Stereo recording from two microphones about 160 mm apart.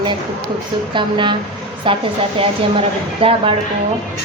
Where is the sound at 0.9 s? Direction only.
30° right (ahead or behind).